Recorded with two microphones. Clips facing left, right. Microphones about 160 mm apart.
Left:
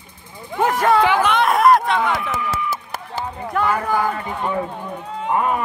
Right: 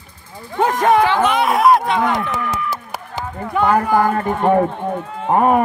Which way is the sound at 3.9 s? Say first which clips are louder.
Right 6 dB; 45° right (ahead or behind).